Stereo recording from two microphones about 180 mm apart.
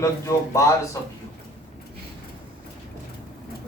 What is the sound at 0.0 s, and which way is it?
Speech, 15° left (ahead or behind).